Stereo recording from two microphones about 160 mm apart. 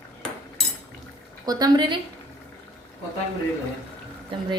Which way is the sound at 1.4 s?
25° right (ahead or behind).